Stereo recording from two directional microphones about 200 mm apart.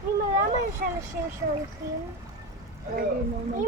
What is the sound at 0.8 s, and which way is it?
Speech, 50° right (ahead or behind).